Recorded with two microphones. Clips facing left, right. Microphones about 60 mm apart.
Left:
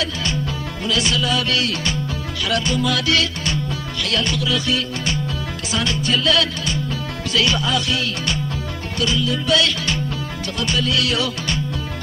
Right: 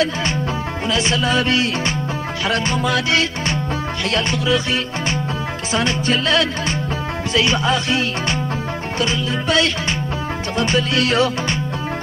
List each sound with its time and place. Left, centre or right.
0.9 s music: right
9.0 s music: right